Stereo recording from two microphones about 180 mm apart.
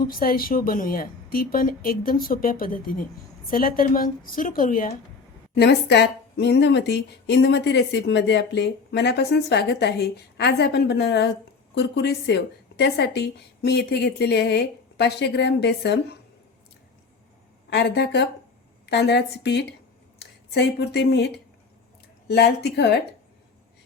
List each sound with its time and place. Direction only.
0.0 s speech: 55° left (ahead or behind)
5.5 s a woman's voice: 70° left (ahead or behind)
17.7 s a woman's voice: 65° left (ahead or behind)